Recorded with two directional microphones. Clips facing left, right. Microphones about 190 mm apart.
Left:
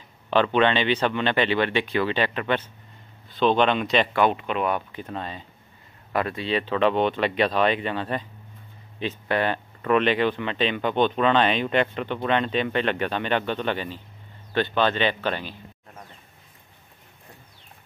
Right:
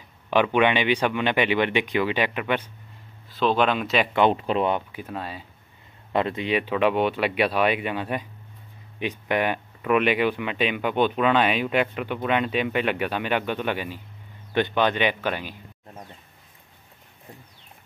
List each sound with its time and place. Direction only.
0.3 s speech: 15° right (ahead or behind)
4.3 s speech: 35° right (ahead or behind)
4.9 s speech: 5° right (ahead or behind)
6.1 s speech: 20° right (ahead or behind)